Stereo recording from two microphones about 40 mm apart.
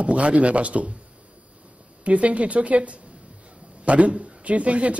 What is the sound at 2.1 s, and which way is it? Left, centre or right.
Speech, right.